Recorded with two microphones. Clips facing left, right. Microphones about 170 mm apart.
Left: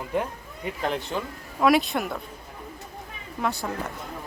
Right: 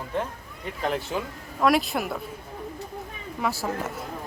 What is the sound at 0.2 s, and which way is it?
Speech, 5° left (ahead or behind).